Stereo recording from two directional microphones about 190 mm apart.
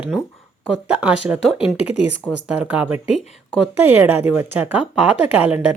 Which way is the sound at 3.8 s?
10° right (ahead or behind).